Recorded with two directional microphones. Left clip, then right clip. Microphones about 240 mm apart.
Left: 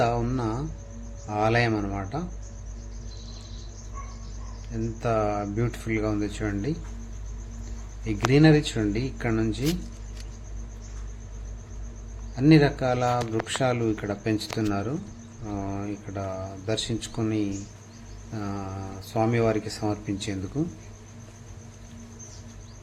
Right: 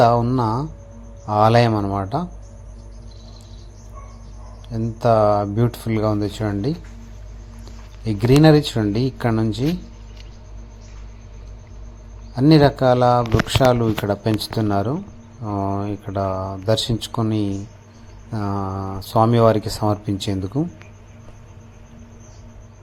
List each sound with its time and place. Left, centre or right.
0.0 s speech: right
4.7 s speech: right
8.0 s speech: right
12.3 s speech: right
18.3 s mantra: centre
18.6 s speech: right